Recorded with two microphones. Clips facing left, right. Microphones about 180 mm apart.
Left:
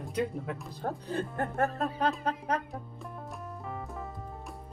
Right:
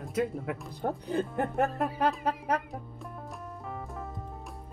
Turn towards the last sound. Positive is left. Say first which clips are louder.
# even
turn(degrees=0)  # may be behind; listen again after turning